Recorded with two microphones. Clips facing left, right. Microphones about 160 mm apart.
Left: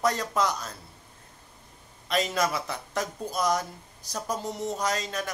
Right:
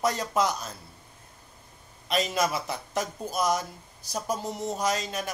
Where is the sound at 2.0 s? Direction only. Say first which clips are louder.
Even; 20° right (ahead or behind).